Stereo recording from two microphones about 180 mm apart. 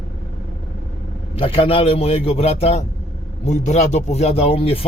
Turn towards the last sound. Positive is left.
turn(degrees=30)  # may be behind; listen again after turning